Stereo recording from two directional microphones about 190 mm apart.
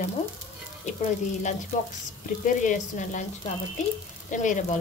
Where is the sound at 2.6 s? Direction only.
40° left (ahead or behind).